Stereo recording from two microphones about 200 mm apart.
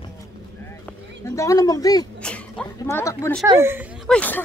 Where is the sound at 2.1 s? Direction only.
5° left (ahead or behind).